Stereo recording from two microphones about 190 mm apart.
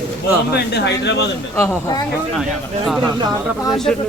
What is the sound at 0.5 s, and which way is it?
Speech, 60° left (ahead or behind).